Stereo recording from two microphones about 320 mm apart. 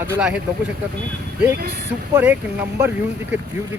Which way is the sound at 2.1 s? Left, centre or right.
Centre.